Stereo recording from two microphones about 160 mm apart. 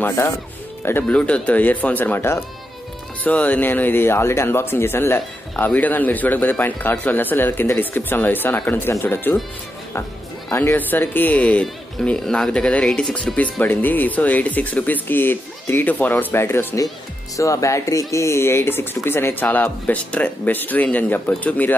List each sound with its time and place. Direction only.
0.0 s speech: 15° left (ahead or behind)
10.5 s speech: 15° left (ahead or behind)